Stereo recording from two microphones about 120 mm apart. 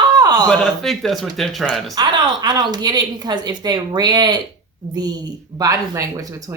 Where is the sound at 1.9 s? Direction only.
35° right (ahead or behind).